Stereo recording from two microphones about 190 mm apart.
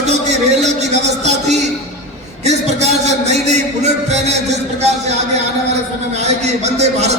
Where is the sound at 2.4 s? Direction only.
35° right (ahead or behind).